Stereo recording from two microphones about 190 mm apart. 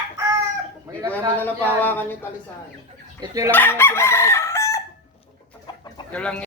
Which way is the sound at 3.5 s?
10° left (ahead or behind).